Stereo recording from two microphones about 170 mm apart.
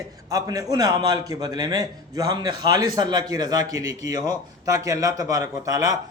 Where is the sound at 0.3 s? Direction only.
20° right (ahead or behind).